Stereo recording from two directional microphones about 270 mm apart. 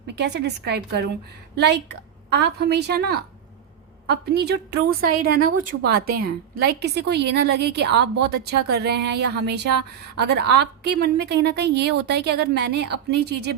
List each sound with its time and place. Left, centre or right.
0.2 s a woman's voice: right